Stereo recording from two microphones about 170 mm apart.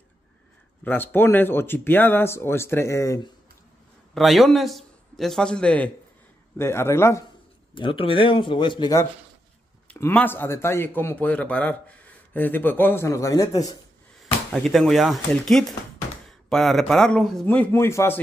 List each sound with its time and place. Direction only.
0.8 s a man's voice: 10° left (ahead or behind)
4.1 s a man's voice: centre (ahead or behind); by 7.2 s 15° left (ahead or behind)
7.7 s speech: 30° left (ahead or behind)
9.8 s a man's voice: 10° left (ahead or behind)
14.5 s speech: centre (ahead or behind)